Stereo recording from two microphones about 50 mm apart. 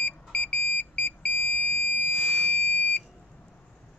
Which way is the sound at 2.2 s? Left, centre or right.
Centre.